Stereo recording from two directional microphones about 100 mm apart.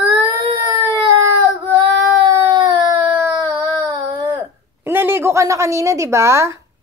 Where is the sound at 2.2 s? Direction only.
50° right (ahead or behind).